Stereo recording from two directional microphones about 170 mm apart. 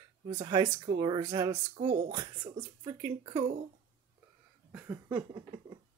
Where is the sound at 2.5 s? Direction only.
20° right (ahead or behind).